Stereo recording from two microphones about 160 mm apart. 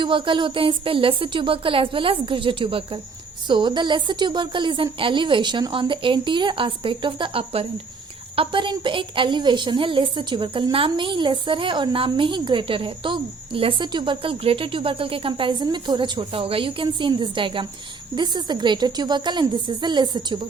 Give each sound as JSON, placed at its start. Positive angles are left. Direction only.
{"t": 0.0, "sound": "a woman's voice", "side_deg": -30}